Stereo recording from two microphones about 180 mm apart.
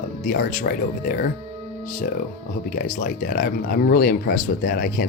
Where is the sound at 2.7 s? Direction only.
50° left (ahead or behind).